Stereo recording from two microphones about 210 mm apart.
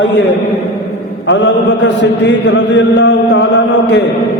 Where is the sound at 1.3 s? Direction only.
60° left (ahead or behind).